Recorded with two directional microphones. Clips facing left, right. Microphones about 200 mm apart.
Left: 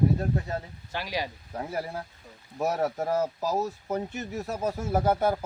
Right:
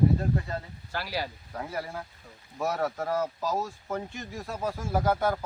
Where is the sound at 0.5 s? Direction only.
15° left (ahead or behind).